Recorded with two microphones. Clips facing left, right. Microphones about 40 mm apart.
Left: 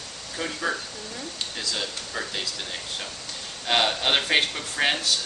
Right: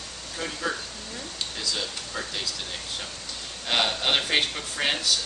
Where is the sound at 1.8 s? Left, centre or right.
Centre.